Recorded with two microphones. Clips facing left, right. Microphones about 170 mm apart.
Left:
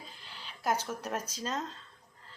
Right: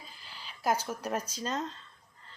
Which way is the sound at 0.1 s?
5° right (ahead or behind).